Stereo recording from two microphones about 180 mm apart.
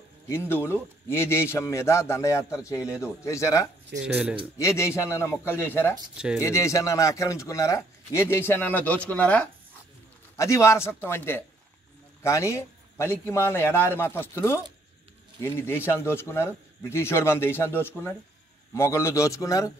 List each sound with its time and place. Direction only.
0.3 s a man's voice: 10° left (ahead or behind)
3.9 s speech: 65° right (ahead or behind)
4.6 s a man's voice: 15° left (ahead or behind)
6.1 s speech: 5° right (ahead or behind)
6.4 s a man's voice: 15° left (ahead or behind)